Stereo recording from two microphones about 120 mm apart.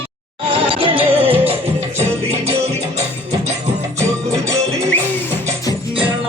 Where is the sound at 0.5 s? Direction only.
45° right (ahead or behind).